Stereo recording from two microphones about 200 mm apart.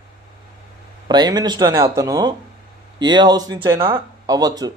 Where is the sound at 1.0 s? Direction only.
20° right (ahead or behind).